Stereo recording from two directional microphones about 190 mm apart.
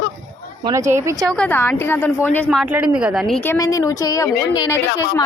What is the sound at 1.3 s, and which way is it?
A woman's voice, 5° left (ahead or behind).